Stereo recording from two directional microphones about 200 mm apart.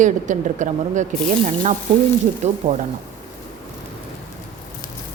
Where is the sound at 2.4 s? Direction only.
35° right (ahead or behind).